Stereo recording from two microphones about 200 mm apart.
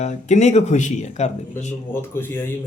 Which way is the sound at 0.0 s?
35° left (ahead or behind).